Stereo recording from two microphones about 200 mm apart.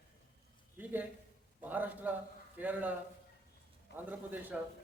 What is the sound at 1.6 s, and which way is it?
A man's voice, 10° right (ahead or behind).